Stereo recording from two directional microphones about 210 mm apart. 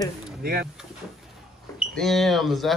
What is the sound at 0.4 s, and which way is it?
Speech, 45° right (ahead or behind).